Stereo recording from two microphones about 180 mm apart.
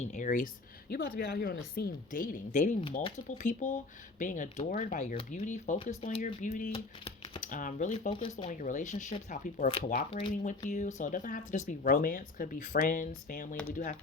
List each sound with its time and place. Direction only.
0.0 s speech: 45° left (ahead or behind)
7.4 s speech: 45° left (ahead or behind); by 8.4 s 30° left (ahead or behind)
8.4 s speech: 45° left (ahead or behind)
10.1 s speech: 30° left (ahead or behind)
10.4 s speech: 40° left (ahead or behind)